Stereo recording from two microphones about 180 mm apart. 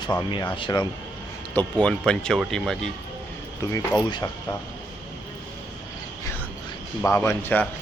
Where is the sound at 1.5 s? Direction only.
5° left (ahead or behind).